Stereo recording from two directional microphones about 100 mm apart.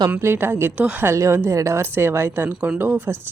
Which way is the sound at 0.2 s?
25° right (ahead or behind).